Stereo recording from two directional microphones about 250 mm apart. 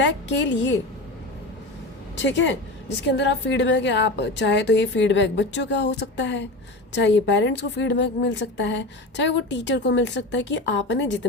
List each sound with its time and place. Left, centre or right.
0.0 s a woman's voice: left
2.2 s a woman's voice: left